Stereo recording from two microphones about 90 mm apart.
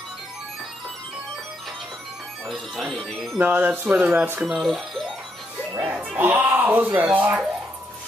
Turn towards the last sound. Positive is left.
turn(degrees=-20)  # may be behind; listen again after turning